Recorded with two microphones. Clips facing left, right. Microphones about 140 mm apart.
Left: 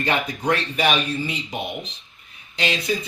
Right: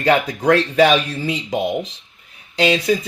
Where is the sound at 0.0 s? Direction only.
90° right.